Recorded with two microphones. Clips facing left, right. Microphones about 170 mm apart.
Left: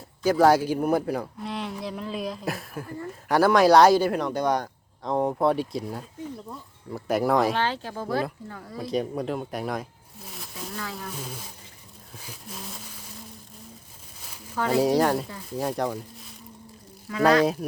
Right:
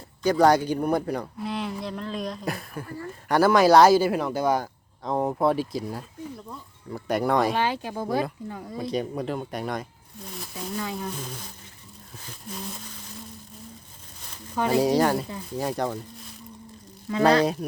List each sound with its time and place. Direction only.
0.2 s speech: 5° left (ahead or behind)
7.5 s speech: 15° right (ahead or behind)
8.8 s speech: centre (ahead or behind)
10.8 s speech: 20° right (ahead or behind)
11.1 s speech: 5° left (ahead or behind)
12.2 s a sound: 5° left (ahead or behind)
14.7 s speech: centre (ahead or behind)
17.1 s speech: 25° right (ahead or behind)
17.4 s speech: centre (ahead or behind)